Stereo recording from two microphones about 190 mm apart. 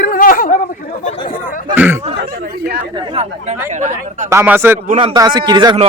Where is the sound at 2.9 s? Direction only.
30° right (ahead or behind).